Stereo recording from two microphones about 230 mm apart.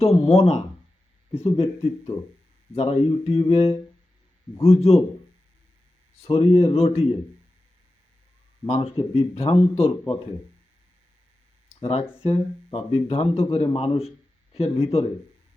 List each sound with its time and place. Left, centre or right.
0.0 s speech: left
6.2 s speech: left
8.6 s speech: left
11.8 s speech: left